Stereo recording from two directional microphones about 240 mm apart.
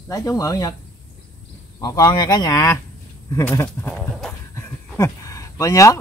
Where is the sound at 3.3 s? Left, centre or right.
Centre.